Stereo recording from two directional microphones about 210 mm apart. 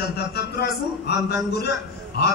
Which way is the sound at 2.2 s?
50° left (ahead or behind).